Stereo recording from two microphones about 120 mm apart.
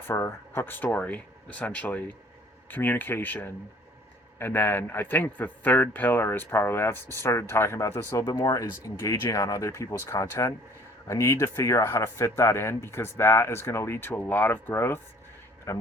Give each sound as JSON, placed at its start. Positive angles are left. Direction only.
{"t": 0.1, "sound": "speech", "side_deg": 25}
{"t": 8.2, "sound": "speech", "side_deg": 35}